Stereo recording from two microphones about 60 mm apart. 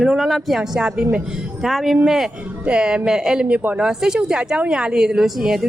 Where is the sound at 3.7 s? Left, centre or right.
Centre.